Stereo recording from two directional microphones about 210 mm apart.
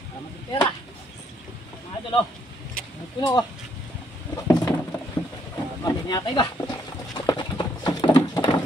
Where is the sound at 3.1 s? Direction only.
20° left (ahead or behind).